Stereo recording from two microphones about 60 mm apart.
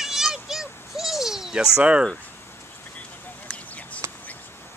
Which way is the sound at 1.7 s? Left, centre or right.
Centre.